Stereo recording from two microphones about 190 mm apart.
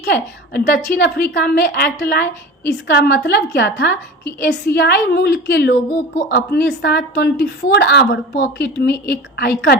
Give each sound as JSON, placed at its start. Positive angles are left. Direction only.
{"t": 0.0, "sound": "a woman's voice", "side_deg": 60}